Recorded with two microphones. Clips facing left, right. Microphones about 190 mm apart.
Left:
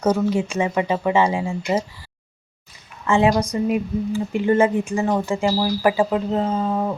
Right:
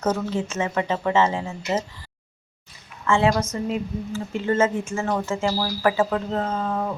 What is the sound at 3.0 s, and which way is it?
Speech, 15° left (ahead or behind).